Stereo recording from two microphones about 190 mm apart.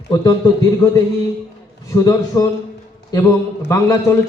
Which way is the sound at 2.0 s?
20° left (ahead or behind).